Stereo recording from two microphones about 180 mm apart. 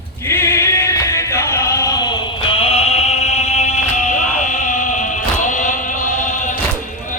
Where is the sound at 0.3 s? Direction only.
15° left (ahead or behind); by 6.6 s 45° left (ahead or behind).